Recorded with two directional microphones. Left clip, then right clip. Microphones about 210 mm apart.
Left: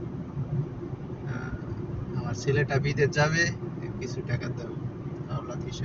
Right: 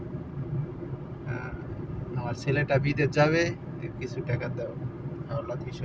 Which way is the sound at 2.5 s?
45° right (ahead or behind).